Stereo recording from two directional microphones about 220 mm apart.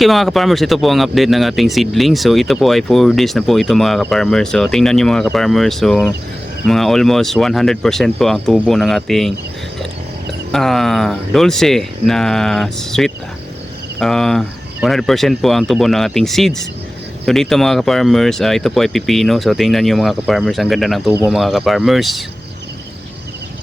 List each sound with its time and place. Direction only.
0.0 s speech: centre (ahead or behind)
10.5 s speech: centre (ahead or behind)